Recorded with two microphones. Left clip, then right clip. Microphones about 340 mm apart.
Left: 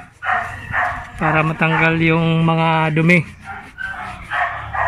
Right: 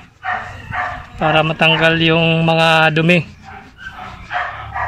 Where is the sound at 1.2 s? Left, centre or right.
Right.